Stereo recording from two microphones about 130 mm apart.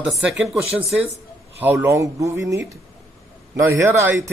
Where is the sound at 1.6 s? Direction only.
20° right (ahead or behind).